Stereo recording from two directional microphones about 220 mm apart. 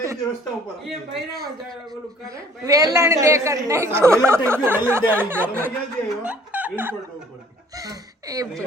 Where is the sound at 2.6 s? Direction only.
15° right (ahead or behind).